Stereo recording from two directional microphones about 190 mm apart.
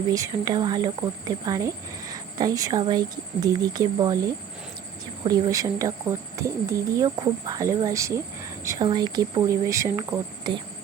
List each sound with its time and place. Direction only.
0.1 s speech: 20° right (ahead or behind)